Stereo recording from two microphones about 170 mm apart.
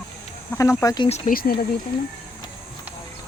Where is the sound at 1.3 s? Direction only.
60° left (ahead or behind).